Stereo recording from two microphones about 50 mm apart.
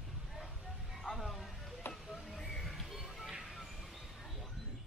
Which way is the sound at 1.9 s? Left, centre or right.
Left.